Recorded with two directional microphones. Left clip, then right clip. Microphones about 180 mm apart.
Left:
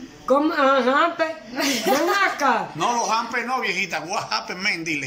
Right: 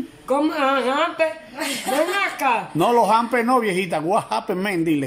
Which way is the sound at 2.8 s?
40° right (ahead or behind).